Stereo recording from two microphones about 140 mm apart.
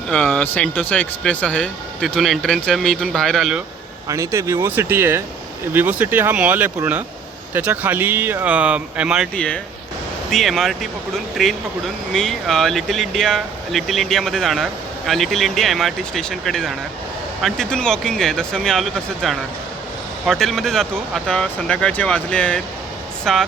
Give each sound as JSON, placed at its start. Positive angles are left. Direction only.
{"t": 0.1, "sound": "speech", "side_deg": 10}
{"t": 4.1, "sound": "speech", "side_deg": -20}
{"t": 9.3, "sound": "speech", "side_deg": 5}